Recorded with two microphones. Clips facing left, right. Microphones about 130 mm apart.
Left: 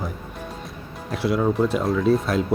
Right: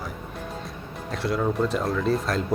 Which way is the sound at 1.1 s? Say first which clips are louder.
Left 4 dB; centre (ahead or behind).